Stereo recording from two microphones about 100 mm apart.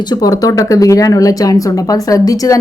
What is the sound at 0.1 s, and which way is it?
A woman's voice, 40° left (ahead or behind).